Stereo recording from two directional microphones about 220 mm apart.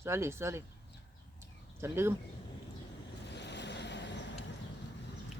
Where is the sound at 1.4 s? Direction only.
10° right (ahead or behind).